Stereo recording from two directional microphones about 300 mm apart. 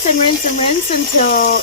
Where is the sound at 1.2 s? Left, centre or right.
Left.